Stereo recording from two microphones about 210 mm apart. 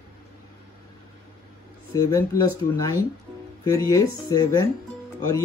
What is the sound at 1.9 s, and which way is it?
Speech, 15° left (ahead or behind).